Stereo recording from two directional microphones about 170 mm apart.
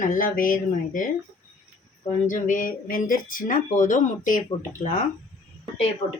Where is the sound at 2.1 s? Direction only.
50° left (ahead or behind).